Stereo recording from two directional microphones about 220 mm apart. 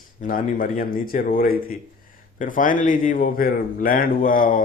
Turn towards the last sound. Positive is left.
turn(degrees=40)  # may be behind; listen again after turning